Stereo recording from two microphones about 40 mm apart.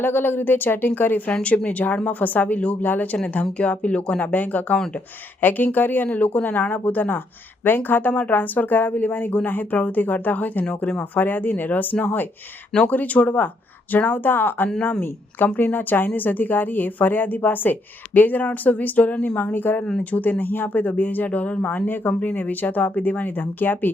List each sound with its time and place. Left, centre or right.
0.0 s speech: left
1.3 s speech: left
2.0 s speech: left
3.6 s speech: left
19.5 s speech: left
20.1 s speech: left
20.4 s speech: left